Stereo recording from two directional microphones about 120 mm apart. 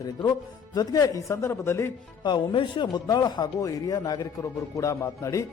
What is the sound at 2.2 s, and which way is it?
Speech, 40° left (ahead or behind).